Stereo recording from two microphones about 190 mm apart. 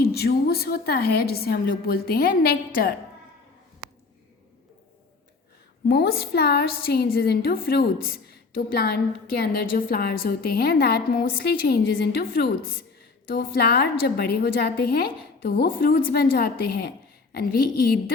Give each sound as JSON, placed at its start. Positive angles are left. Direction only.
{"t": 0.1, "sound": "a woman's voice", "side_deg": 55}
{"t": 5.9, "sound": "a woman's voice", "side_deg": 60}